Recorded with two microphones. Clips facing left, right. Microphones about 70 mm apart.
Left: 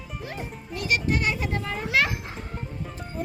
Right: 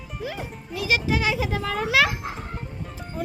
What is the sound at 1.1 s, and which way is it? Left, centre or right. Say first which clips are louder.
A child's voice: right 2 dB; right.